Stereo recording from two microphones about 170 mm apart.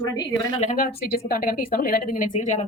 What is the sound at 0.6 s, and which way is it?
Speech, 50° left (ahead or behind).